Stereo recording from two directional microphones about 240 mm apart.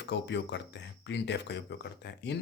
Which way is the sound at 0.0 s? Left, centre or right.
Left.